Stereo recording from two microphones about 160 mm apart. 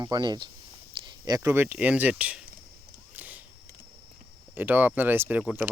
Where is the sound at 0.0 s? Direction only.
25° right (ahead or behind); by 2.4 s 10° right (ahead or behind).